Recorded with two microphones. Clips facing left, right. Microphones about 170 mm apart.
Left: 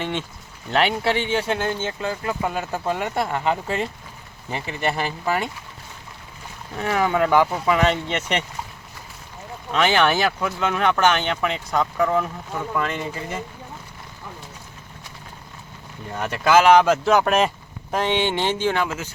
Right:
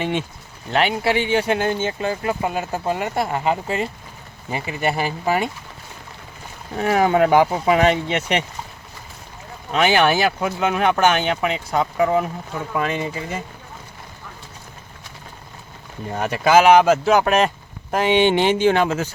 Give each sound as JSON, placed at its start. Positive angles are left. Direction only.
{"t": 0.0, "sound": "speech", "side_deg": -10}
{"t": 7.2, "sound": "speech", "side_deg": -15}
{"t": 9.7, "sound": "speech", "side_deg": -10}
{"t": 16.2, "sound": "speech", "side_deg": -10}